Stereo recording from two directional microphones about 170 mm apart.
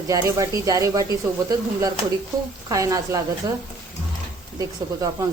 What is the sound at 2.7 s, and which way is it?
Speech, 20° right (ahead or behind).